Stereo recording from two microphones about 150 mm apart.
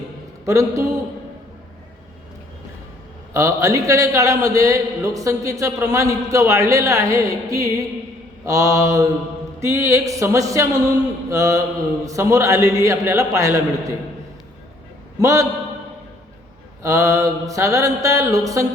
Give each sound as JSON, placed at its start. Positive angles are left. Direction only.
{"t": 0.4, "sound": "a man's voice", "side_deg": -20}
{"t": 3.3, "sound": "a man's voice", "side_deg": -20}
{"t": 15.2, "sound": "a man's voice", "side_deg": -20}
{"t": 16.8, "sound": "a man's voice", "side_deg": -20}